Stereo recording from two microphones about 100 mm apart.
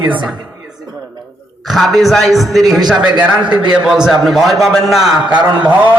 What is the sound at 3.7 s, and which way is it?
Speech, 5° right (ahead or behind).